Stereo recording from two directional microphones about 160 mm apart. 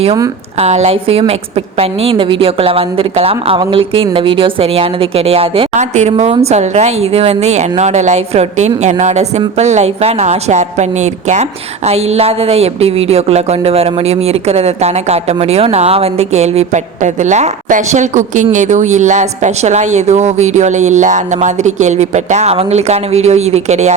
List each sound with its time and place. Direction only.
0.6 s a woman's voice: 40° right (ahead or behind)